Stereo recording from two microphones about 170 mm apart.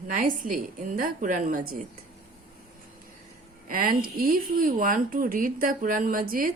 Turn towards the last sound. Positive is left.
turn(degrees=-55)  # may be behind; listen again after turning